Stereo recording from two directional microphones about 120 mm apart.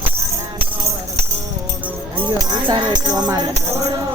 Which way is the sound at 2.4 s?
40° right (ahead or behind).